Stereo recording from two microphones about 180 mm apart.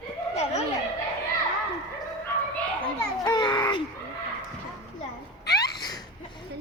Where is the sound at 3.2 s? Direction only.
25° left (ahead or behind).